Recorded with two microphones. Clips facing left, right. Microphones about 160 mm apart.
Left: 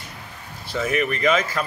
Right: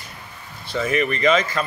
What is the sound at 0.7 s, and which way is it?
Speech, 5° left (ahead or behind).